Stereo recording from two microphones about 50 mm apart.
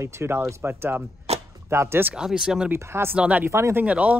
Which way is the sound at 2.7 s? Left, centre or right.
Right.